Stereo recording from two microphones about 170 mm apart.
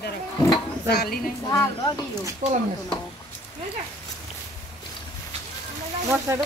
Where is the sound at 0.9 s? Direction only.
70° left (ahead or behind).